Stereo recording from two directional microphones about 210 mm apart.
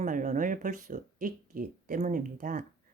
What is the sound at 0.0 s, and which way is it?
Speech, 40° right (ahead or behind).